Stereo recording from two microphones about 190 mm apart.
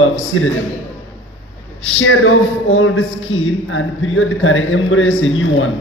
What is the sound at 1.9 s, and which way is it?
A man's voice, 90° left.